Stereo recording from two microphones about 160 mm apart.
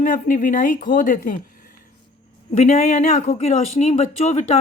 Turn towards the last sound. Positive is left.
turn(degrees=45)  # may be behind; listen again after turning